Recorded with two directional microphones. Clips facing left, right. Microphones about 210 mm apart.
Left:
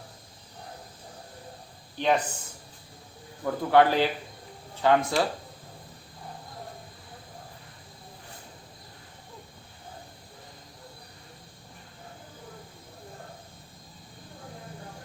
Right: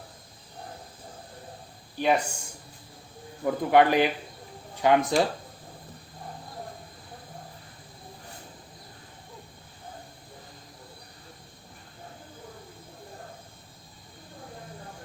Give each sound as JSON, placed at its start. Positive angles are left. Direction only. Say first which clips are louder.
{"t": 2.0, "sound": "speech", "louder": "right 1 dB", "side_deg": -10}
{"t": 3.4, "sound": "speech", "louder": "right 1 dB", "side_deg": -15}